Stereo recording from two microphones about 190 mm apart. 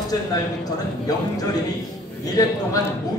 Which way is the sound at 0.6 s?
20° left (ahead or behind).